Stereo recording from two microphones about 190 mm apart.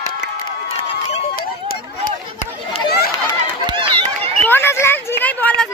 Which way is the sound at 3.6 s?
25° right (ahead or behind).